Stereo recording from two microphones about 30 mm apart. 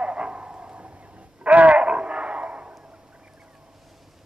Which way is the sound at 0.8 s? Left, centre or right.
Right.